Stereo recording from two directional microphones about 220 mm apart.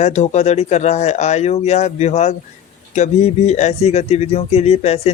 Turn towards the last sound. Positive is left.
turn(degrees=30)  # may be behind; listen again after turning